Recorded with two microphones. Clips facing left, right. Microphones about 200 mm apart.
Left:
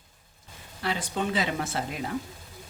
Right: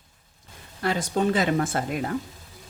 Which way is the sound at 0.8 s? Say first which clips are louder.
Right 6 dB; 45° right (ahead or behind).